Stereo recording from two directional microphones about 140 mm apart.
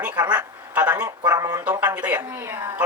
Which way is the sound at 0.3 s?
10° right (ahead or behind).